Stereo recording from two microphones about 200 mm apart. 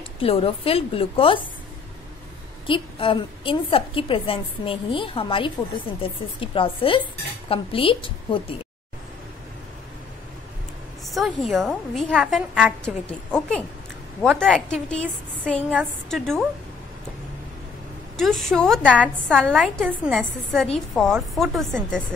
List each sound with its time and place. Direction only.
0.2 s a woman's voice: 30° left (ahead or behind)
2.6 s a woman's voice: 25° left (ahead or behind)
11.1 s a woman's voice: centre (ahead or behind)
18.1 s a woman's voice: centre (ahead or behind)